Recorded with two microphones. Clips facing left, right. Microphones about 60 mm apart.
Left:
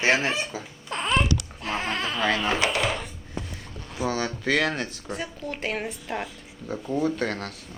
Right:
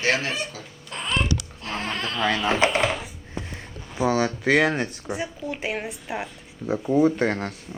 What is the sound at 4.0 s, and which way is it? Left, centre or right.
Speech, centre.